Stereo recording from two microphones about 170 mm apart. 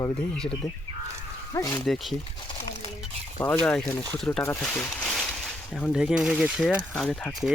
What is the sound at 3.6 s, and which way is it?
Speech, 5° left (ahead or behind).